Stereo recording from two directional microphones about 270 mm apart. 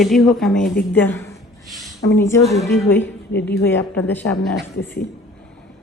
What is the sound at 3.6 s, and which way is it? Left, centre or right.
Speech, centre.